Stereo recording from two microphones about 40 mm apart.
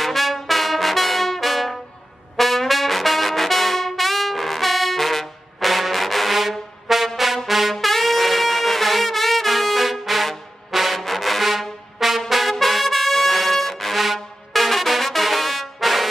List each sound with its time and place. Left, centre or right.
0.0 s brass instrument: centre
2.3 s music: centre
7.4 s brass instrument: centre
10.7 s music: centre
12.3 s brass instrument: centre